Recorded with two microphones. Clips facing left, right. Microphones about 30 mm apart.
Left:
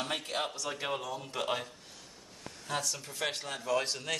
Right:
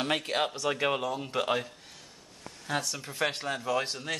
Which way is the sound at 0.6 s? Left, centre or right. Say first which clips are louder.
Right 7 dB; right.